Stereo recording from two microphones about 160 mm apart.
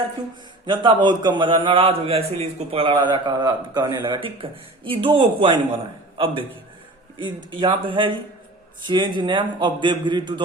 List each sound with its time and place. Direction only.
0.7 s a man's voice: 30° right (ahead or behind)